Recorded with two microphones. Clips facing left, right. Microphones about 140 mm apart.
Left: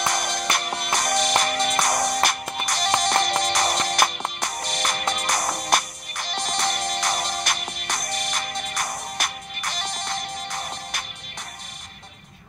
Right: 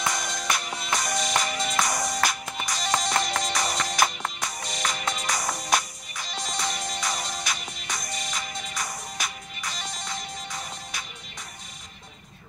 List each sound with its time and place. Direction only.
0.0 s music: 65° left (ahead or behind)